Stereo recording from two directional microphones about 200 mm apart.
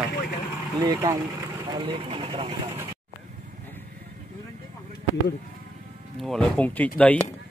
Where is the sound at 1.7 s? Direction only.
25° right (ahead or behind).